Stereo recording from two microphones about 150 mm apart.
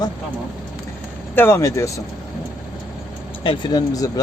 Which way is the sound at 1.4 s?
20° left (ahead or behind).